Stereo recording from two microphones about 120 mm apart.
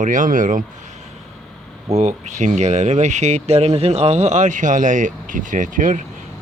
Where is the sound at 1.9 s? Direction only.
70° right (ahead or behind); by 6.0 s 90° right.